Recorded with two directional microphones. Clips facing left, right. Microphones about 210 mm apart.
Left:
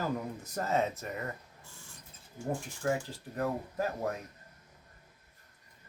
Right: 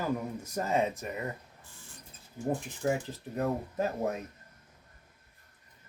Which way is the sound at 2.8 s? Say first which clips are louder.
Right 2 dB; 25° right (ahead or behind).